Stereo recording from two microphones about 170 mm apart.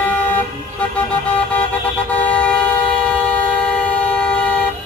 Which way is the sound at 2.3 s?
5° left (ahead or behind).